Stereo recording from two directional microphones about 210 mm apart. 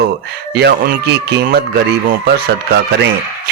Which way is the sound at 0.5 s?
50° right (ahead or behind).